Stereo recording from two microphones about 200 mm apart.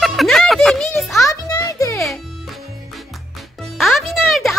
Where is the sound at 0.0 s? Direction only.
Centre (ahead or behind).